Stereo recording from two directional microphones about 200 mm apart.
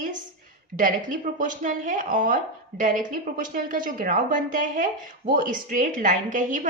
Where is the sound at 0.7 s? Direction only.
40° right (ahead or behind).